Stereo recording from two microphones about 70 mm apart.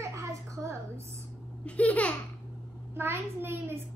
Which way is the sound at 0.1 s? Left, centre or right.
Right.